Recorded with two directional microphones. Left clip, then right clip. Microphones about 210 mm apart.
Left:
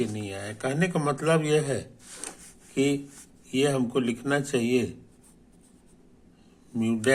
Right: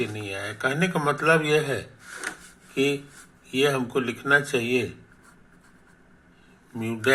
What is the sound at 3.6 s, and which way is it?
Speech, 25° left (ahead or behind).